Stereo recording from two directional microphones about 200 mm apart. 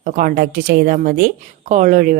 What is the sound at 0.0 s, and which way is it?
Speech, 45° right (ahead or behind).